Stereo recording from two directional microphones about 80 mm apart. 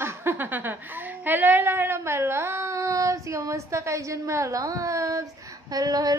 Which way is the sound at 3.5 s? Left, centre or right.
Right.